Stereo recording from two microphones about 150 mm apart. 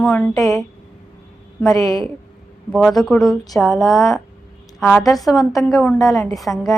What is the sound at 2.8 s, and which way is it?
A woman's voice, centre (ahead or behind).